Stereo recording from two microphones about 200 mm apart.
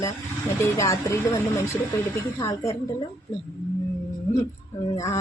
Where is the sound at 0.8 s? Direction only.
15° left (ahead or behind).